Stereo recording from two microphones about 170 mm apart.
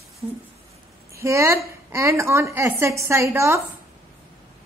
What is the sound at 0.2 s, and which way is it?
A woman's voice, 15° right (ahead or behind).